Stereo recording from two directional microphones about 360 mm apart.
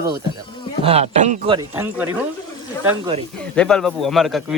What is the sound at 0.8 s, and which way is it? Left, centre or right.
Speech, centre.